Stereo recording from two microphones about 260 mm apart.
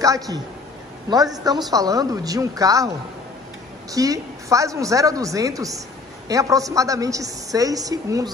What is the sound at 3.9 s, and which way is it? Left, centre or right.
A woman's voice, centre.